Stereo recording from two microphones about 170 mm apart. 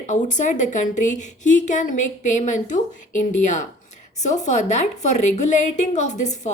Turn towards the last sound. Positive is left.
turn(degrees=45)  # may be behind; listen again after turning